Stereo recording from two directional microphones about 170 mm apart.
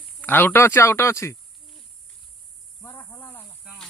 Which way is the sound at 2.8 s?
15° left (ahead or behind).